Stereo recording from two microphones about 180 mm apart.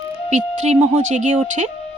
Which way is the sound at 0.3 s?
40° right (ahead or behind).